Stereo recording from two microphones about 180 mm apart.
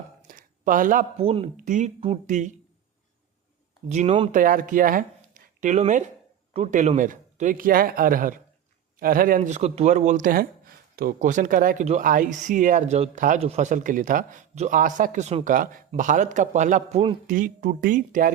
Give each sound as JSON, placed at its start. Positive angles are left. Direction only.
{"t": 0.2, "sound": "a sound", "side_deg": -50}
{"t": 1.1, "sound": "speech", "side_deg": -35}
{"t": 3.8, "sound": "speech", "side_deg": -35}
{"t": 4.3, "sound": "speech", "side_deg": -50}